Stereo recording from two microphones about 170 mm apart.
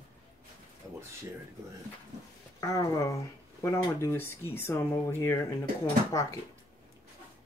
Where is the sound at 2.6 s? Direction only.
15° left (ahead or behind).